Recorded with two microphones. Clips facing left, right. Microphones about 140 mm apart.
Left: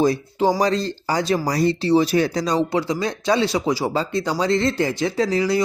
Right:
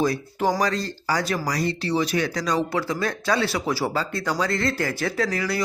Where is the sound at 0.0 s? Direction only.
25° left (ahead or behind).